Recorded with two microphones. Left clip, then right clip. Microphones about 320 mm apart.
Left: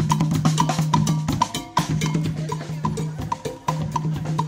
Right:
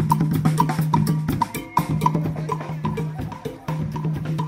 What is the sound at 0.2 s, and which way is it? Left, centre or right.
Music, centre.